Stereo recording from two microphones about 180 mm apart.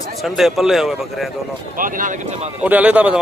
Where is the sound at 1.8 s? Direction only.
50° right (ahead or behind).